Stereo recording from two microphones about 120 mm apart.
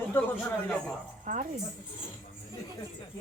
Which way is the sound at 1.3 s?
90° right.